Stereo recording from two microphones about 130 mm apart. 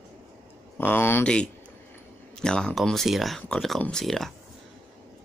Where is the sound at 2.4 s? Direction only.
5° left (ahead or behind).